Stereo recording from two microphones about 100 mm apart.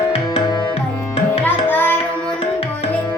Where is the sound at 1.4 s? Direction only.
20° left (ahead or behind).